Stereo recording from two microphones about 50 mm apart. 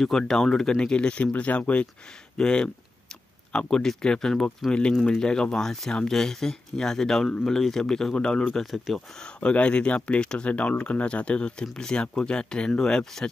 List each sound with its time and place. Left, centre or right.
0.2 s speech: centre; by 1.9 s left
2.3 s speech: centre
8.7 s speech: centre
9.4 s speech: left